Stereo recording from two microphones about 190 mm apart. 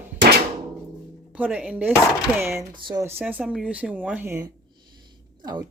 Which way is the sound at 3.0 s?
10° right (ahead or behind).